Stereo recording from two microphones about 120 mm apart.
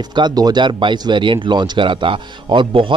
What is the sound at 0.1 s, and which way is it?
Speech, 35° right (ahead or behind).